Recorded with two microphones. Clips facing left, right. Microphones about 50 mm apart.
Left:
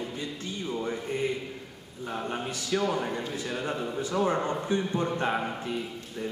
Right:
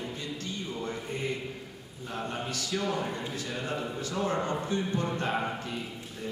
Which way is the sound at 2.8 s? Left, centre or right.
Centre.